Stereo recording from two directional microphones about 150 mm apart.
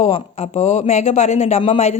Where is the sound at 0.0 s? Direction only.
40° left (ahead or behind).